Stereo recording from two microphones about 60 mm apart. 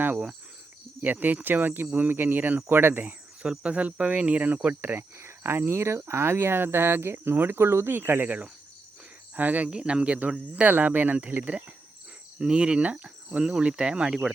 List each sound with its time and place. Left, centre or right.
1.0 s speech: right
3.4 s speech: centre; by 8.3 s right
9.3 s speech: right
12.4 s speech: centre